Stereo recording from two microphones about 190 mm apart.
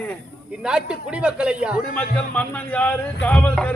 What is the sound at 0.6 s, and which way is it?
Speech, 5° right (ahead or behind).